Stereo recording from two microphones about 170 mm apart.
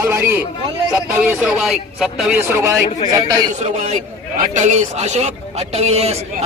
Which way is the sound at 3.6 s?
45° right (ahead or behind).